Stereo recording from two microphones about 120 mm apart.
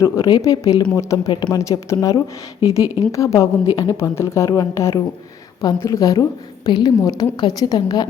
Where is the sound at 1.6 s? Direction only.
25° left (ahead or behind).